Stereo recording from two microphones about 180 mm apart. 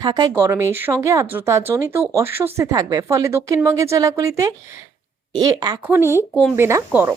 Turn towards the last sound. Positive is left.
turn(degrees=-15)  # may be behind; listen again after turning